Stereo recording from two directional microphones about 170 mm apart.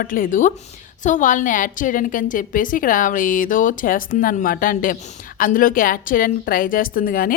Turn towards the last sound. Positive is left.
turn(degrees=55)  # may be behind; listen again after turning